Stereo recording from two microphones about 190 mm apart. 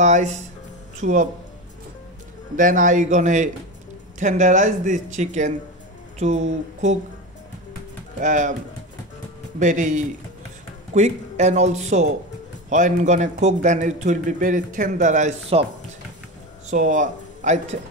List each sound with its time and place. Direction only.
0.0 s a man's voice: 40° right (ahead or behind)
2.5 s a man's voice: 45° right (ahead or behind)
8.2 s a man's voice: 40° right (ahead or behind)
9.6 s a man's voice: 40° right (ahead or behind)
16.7 s speech: 40° right (ahead or behind)